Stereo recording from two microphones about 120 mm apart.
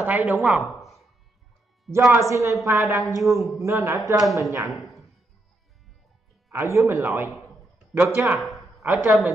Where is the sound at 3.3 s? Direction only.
Centre (ahead or behind).